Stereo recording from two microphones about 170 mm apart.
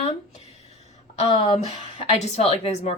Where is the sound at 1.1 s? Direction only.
40° left (ahead or behind).